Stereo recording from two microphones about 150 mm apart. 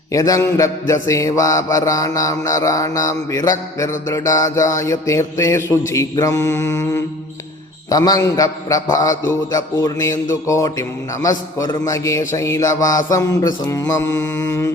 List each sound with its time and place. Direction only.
0.1 s mantra: 20° left (ahead or behind)